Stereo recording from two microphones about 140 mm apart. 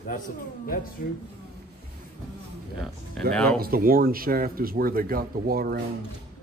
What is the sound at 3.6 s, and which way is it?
Speech, 90° right.